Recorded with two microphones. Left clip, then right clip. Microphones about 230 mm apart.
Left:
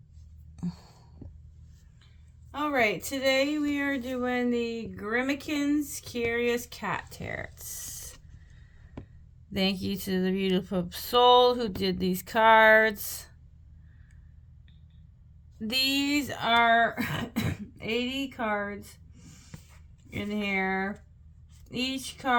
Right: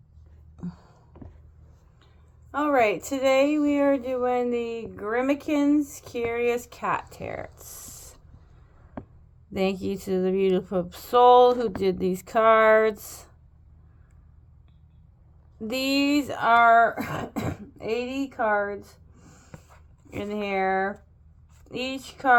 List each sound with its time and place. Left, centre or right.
0.5 s a sound: left
2.5 s speech: left
9.5 s speech: left
15.6 s speech: left
18.3 s a sound: left
20.1 s speech: left